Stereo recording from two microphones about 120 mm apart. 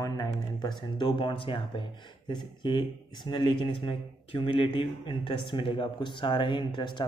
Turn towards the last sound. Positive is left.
turn(degrees=40)  # may be behind; listen again after turning